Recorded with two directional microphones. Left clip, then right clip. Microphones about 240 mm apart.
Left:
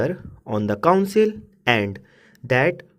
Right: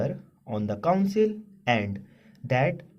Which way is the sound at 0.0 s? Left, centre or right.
Left.